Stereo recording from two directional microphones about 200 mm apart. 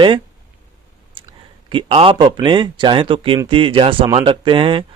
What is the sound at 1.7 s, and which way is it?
Speech, 25° right (ahead or behind).